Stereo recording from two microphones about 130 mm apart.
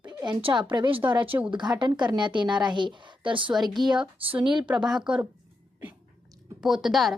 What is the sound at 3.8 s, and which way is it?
Speech, 35° right (ahead or behind).